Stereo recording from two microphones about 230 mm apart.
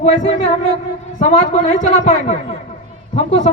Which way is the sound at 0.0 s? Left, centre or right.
Left.